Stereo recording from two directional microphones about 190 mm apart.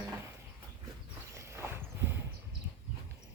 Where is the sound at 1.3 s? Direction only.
15° right (ahead or behind).